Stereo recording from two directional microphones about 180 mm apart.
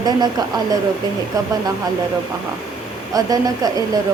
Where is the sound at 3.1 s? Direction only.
20° right (ahead or behind).